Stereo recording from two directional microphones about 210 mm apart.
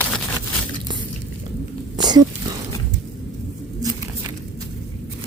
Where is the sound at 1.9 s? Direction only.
20° right (ahead or behind).